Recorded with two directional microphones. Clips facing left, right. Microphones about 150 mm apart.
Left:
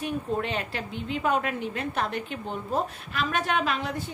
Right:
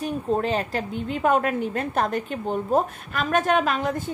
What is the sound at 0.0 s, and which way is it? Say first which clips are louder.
A woman's voice: right 5 dB; 35° right (ahead or behind).